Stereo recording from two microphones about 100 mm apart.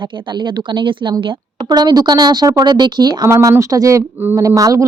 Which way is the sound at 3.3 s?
30° right (ahead or behind).